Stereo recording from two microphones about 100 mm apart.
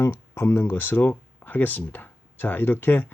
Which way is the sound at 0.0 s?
25° left (ahead or behind).